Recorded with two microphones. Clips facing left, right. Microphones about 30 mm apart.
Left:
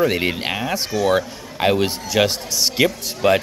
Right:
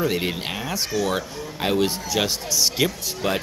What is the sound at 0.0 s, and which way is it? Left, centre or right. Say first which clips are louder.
A man's voice: left 5 dB; centre.